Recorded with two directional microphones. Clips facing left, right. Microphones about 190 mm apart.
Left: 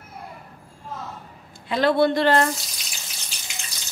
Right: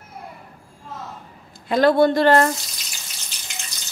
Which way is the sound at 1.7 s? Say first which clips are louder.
Right 4 dB; 45° right (ahead or behind).